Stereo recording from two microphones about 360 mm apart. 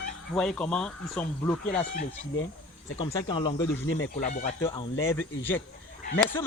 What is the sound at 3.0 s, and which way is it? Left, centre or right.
Speech, centre.